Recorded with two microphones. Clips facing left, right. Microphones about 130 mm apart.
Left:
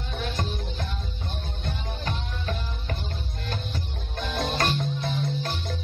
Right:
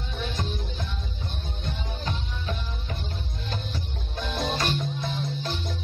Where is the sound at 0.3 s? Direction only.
55° left (ahead or behind).